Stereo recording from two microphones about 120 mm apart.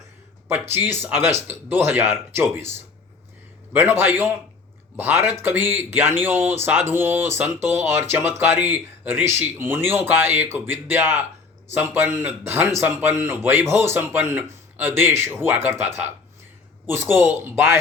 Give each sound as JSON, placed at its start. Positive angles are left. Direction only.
{"t": 0.4, "sound": "speech", "side_deg": -20}